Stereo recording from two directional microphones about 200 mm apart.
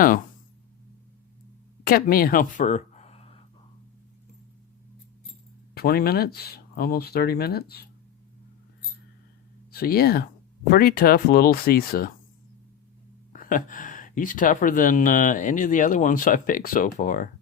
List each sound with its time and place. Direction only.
1.8 s speech: 45° left (ahead or behind); by 3.3 s 30° left (ahead or behind)
5.7 s speech: 50° left (ahead or behind)
9.7 s speech: 50° left (ahead or behind)
13.3 s speech: 40° left (ahead or behind)